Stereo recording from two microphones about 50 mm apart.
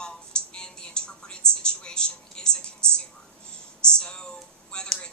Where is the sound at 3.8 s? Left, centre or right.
Centre.